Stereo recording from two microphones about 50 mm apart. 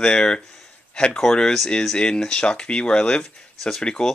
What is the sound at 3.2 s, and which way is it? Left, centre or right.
Speech, centre.